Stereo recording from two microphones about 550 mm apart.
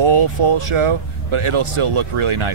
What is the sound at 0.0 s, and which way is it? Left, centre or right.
Speech, right.